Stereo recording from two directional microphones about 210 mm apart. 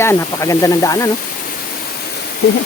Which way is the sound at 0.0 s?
15° left (ahead or behind).